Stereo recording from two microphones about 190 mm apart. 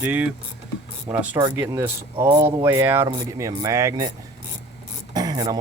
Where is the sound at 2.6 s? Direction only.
10° right (ahead or behind).